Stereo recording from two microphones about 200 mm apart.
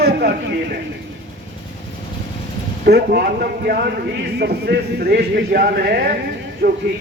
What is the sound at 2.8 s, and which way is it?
A man's voice, 50° right (ahead or behind).